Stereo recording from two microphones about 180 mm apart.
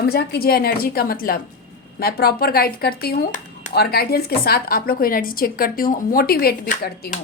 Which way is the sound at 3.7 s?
60° left (ahead or behind).